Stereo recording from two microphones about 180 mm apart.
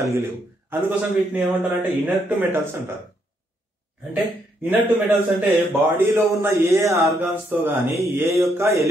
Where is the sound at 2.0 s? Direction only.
10° right (ahead or behind).